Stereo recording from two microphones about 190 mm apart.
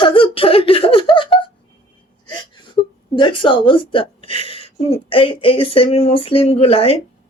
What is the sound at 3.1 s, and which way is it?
Speech, 25° left (ahead or behind).